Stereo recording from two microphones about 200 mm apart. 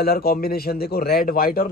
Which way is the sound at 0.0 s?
50° left (ahead or behind).